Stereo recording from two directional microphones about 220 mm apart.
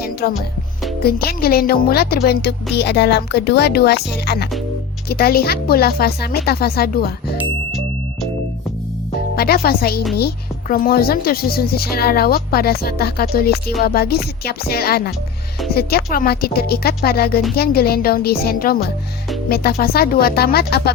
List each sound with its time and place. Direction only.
0.2 s music: 40° left (ahead or behind)
1.0 s a woman's voice: 45° left (ahead or behind)
9.3 s a woman's voice: 45° left (ahead or behind)